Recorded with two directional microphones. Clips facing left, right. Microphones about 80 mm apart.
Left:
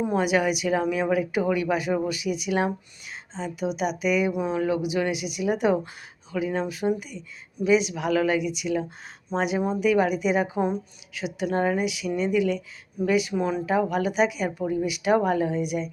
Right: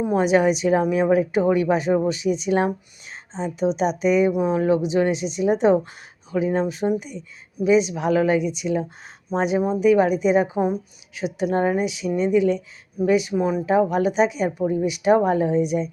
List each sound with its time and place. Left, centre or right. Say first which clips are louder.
0.0 s a woman's voice: right 5 dB; right
2.6 s a woman's voice: right 3 dB; centre